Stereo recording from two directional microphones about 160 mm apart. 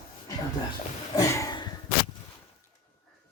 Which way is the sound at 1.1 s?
20° left (ahead or behind).